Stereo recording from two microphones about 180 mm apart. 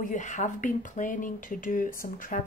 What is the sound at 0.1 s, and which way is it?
Speech, 45° left (ahead or behind).